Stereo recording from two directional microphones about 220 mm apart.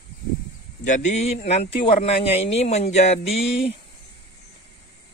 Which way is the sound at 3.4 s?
55° left (ahead or behind).